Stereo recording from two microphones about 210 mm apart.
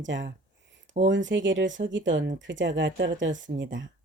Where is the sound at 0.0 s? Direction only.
60° right (ahead or behind).